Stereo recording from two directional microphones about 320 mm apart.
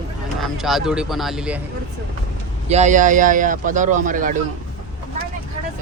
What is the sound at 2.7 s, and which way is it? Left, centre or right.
Speech, right.